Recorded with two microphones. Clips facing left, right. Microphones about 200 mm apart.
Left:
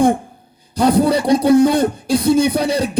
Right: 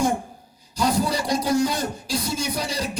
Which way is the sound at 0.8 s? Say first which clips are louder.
Left 9 dB; 60° left (ahead or behind).